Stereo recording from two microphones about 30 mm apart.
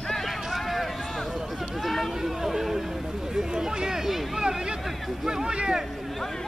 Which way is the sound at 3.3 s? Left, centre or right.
Right.